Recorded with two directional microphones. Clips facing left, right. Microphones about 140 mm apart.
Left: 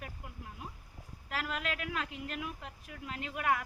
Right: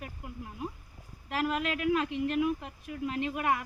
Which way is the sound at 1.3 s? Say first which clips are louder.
Right 7 dB; 20° right (ahead or behind).